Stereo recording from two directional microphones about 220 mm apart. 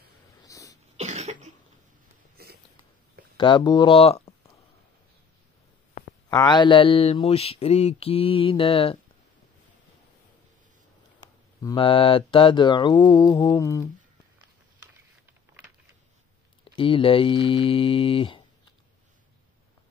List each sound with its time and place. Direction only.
0.4 s sneeze: 15° left (ahead or behind)
0.9 s cough: 30° right (ahead or behind)
2.3 s a sound: 45° right (ahead or behind)
3.3 s speech: 20° left (ahead or behind)
6.3 s mantra: 20° left (ahead or behind)
11.6 s mantra: 25° left (ahead or behind)
16.6 s mantra: 25° left (ahead or behind)